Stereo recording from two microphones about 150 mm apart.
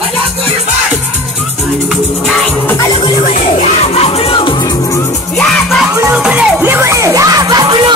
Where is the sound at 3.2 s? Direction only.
45° left (ahead or behind); by 5.0 s 25° left (ahead or behind).